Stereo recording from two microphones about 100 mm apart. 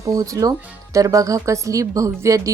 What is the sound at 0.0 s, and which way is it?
A woman's voice, 35° right (ahead or behind).